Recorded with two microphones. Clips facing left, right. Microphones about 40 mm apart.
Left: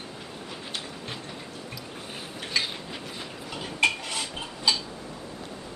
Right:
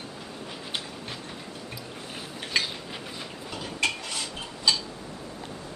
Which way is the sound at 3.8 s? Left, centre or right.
Left.